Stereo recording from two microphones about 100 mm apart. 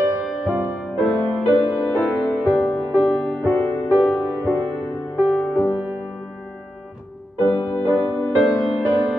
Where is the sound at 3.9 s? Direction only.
Centre (ahead or behind).